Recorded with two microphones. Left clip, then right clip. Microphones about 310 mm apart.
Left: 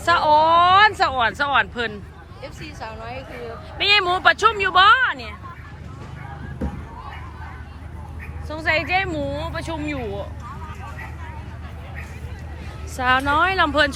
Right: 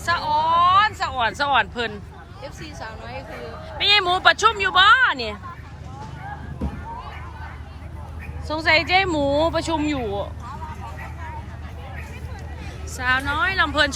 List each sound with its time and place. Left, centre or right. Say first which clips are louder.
0.0 s a sound: left 5 dB; centre
2.4 s speech: left 1 dB; left
3.8 s speech: even; centre
8.4 s speech: right 3 dB; centre
13.0 s speech: left 3 dB; centre